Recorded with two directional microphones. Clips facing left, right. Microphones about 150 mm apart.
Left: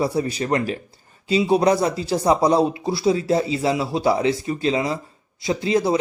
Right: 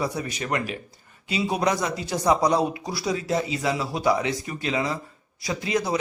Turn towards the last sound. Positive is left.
turn(degrees=30)  # may be behind; listen again after turning